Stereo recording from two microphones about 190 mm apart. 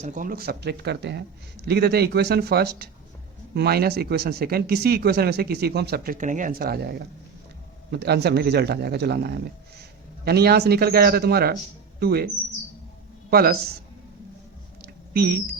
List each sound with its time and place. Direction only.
0.0 s speech: 45° right (ahead or behind)
13.3 s speech: 55° right (ahead or behind)
15.1 s speech: 55° right (ahead or behind)